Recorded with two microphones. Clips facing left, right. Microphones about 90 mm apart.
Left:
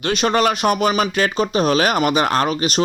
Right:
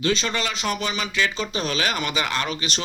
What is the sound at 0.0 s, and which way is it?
Speech, 55° left (ahead or behind).